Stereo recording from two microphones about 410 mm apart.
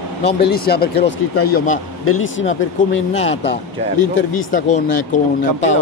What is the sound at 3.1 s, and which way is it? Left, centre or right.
Speech, centre.